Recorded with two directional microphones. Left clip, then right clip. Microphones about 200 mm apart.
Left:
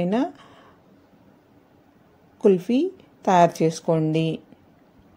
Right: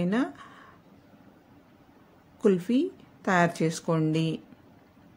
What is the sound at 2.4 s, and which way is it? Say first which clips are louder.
A woman's voice: left 6 dB; 10° left (ahead or behind).